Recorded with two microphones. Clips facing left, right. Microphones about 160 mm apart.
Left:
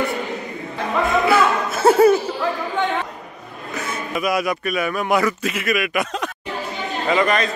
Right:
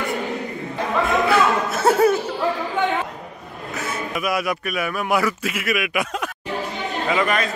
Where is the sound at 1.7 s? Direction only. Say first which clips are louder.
Left 6 dB; centre (ahead or behind).